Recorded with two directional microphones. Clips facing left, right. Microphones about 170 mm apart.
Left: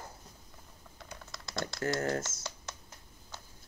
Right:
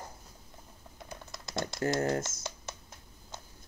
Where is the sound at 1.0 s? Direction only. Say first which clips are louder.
Right 2 dB; 20° right (ahead or behind).